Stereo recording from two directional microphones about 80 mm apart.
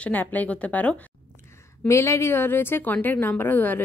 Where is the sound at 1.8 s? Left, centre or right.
Left.